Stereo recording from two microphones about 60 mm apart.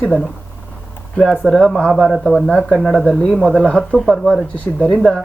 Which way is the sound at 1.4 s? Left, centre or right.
Centre.